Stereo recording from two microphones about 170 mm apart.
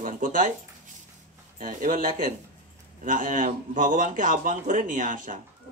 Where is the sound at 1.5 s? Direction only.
50° right (ahead or behind).